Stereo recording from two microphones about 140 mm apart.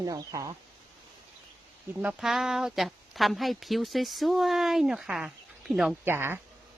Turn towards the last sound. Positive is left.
turn(degrees=-15)  # may be behind; listen again after turning